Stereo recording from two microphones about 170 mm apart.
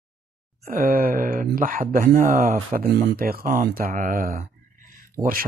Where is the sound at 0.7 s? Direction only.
55° right (ahead or behind).